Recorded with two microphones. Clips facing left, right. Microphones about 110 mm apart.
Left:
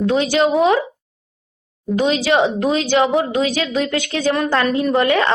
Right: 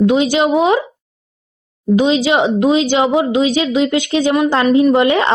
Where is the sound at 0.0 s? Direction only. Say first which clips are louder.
Right 4 dB; 15° right (ahead or behind).